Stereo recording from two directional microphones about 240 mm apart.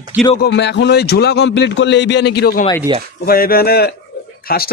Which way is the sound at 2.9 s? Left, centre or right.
Centre.